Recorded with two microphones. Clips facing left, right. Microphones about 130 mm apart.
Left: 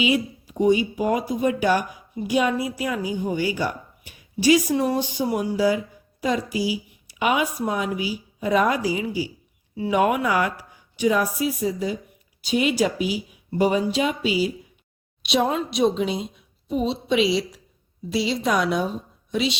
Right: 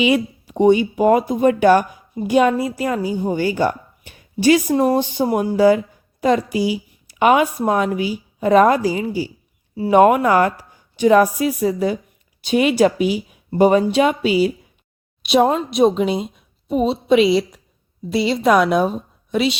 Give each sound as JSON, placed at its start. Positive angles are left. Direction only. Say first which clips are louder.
{"t": 0.0, "sound": "a woman's voice", "louder": "right 5 dB", "side_deg": -60}
{"t": 13.0, "sound": "speech", "louder": "right 6 dB", "side_deg": 5}
{"t": 13.5, "sound": "a woman's voice", "louder": "right 7 dB", "side_deg": -50}